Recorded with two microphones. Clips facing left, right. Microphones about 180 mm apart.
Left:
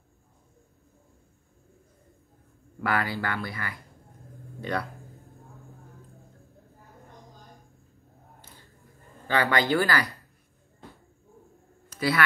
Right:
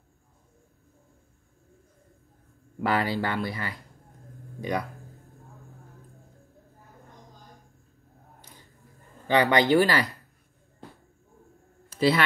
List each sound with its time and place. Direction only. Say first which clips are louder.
2.8 s speech: right 3 dB; 20° right (ahead or behind)
9.3 s speech: right 4 dB; 20° right (ahead or behind)